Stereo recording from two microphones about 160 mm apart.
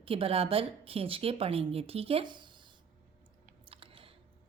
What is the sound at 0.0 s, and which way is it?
A woman's voice, 35° right (ahead or behind).